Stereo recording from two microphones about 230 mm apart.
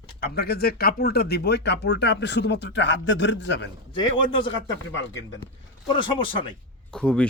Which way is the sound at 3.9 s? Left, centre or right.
Left.